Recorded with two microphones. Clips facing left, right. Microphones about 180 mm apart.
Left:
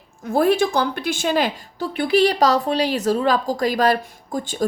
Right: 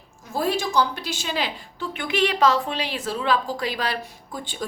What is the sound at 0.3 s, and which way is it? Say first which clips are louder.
A woman's voice: left 7 dB; 55° left (ahead or behind).